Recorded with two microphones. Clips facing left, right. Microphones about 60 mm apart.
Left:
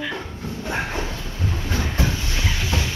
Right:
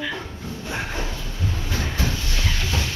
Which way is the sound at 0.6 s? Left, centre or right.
Left.